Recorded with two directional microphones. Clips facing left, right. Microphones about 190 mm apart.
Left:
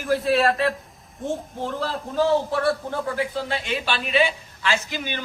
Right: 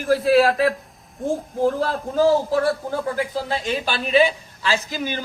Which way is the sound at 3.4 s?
35° right (ahead or behind).